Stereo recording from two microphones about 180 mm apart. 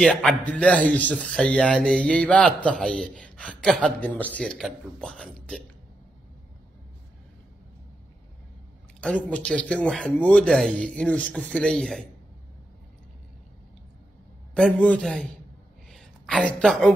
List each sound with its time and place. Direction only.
0.0 s a man's voice: centre (ahead or behind)
9.0 s a man's voice: 10° left (ahead or behind)
14.5 s a man's voice: 5° left (ahead or behind)